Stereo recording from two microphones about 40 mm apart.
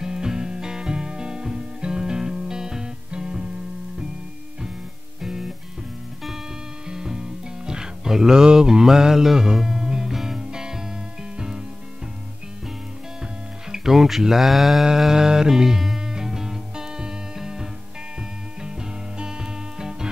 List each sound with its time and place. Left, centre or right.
0.0 s music: centre
5.2 s music: centre
6.9 s music: centre
13.7 s speech: centre
15.0 s music: centre